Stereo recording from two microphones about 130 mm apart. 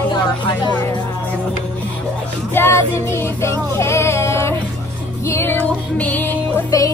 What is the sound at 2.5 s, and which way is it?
Music, 20° left (ahead or behind).